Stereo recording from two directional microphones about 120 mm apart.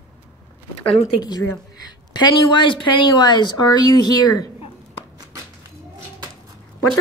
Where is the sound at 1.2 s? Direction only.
35° left (ahead or behind).